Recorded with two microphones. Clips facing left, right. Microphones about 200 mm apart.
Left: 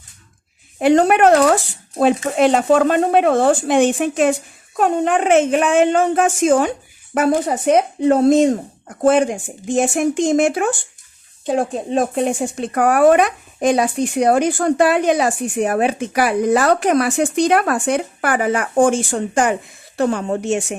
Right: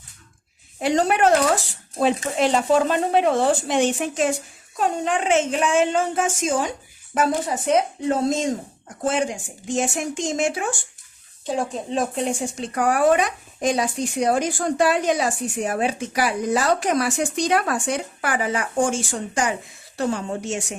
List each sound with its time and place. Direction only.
0.8 s speech: 60° left (ahead or behind)